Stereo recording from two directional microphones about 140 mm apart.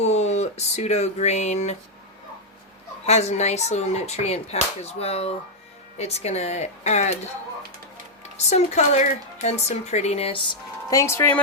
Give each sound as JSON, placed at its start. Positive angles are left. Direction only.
{"t": 0.0, "sound": "speech", "side_deg": 50}
{"t": 3.1, "sound": "speech", "side_deg": 50}
{"t": 8.4, "sound": "speech", "side_deg": 55}